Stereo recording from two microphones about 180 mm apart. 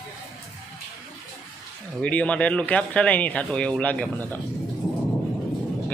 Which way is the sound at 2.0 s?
5° left (ahead or behind).